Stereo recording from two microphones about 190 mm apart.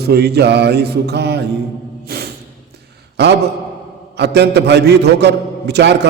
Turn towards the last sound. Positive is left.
turn(degrees=-65)  # may be behind; listen again after turning